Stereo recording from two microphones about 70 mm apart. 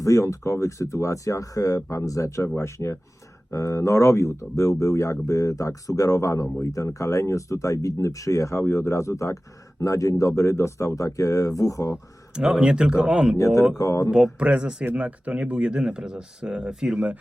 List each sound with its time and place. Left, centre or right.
0.0 s speech: left
12.3 s speech: centre
13.3 s speech: left
14.1 s speech: centre